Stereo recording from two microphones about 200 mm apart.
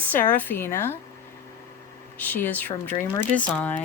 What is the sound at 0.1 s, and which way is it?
Speech, 10° left (ahead or behind).